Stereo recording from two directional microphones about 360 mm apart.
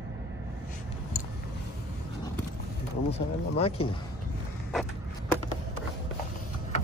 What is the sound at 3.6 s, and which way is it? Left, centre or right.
Speech, centre.